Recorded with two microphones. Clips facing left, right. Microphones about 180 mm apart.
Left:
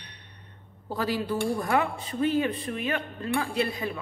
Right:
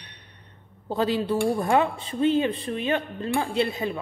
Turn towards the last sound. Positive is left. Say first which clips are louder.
# right 3 dB
turn(degrees=-25)  # may be behind; listen again after turning